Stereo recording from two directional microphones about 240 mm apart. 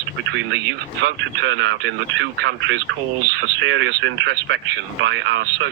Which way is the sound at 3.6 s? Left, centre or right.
Right.